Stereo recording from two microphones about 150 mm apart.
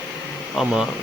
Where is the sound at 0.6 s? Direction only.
5° right (ahead or behind).